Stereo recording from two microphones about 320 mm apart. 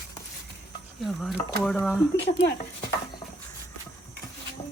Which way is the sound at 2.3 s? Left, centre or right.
Left.